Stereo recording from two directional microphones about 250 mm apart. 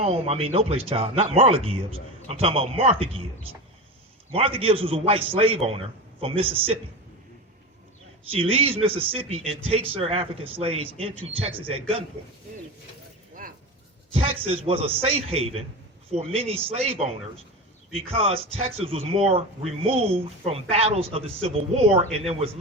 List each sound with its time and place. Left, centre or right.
0.0 s speech: right
4.4 s speech: right
8.3 s speech: right
14.1 s speech: right
18.1 s speech: right